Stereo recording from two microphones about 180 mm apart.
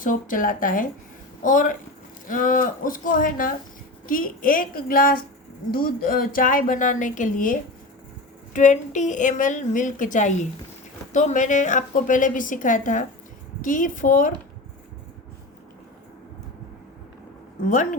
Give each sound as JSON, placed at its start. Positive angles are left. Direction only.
{"t": 0.0, "sound": "a woman's voice", "side_deg": 50}
{"t": 8.5, "sound": "a woman's voice", "side_deg": 45}